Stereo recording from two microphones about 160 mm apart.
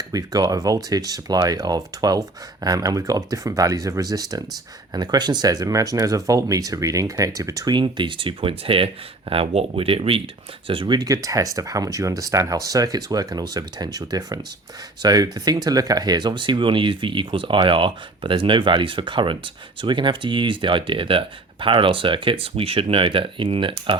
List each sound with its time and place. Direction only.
0.1 s speech: 25° right (ahead or behind)